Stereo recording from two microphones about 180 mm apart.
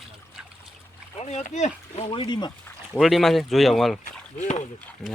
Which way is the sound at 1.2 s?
40° left (ahead or behind).